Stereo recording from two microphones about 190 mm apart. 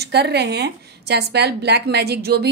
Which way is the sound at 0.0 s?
60° right (ahead or behind).